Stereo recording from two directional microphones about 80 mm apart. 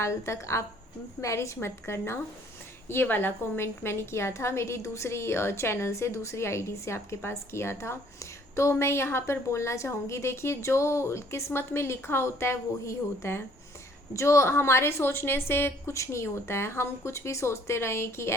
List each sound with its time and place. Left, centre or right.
0.0 s a woman's voice: left